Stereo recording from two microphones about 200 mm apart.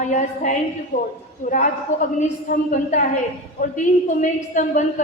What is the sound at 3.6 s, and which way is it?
A woman's voice, 40° left (ahead or behind).